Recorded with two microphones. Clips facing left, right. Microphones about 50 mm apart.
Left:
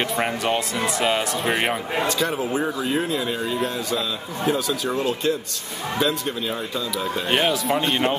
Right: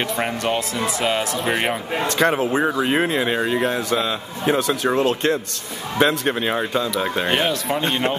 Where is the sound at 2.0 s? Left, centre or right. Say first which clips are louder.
Right 7 dB; right.